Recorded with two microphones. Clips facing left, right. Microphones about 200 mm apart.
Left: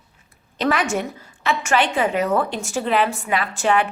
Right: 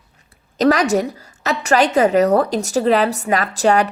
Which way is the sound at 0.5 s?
40° right (ahead or behind).